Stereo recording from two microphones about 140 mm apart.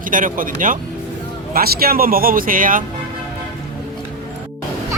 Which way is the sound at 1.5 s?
90° right.